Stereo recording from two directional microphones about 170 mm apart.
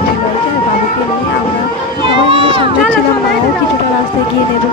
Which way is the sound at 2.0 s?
30° right (ahead or behind).